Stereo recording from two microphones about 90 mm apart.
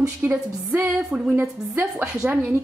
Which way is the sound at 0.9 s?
15° right (ahead or behind).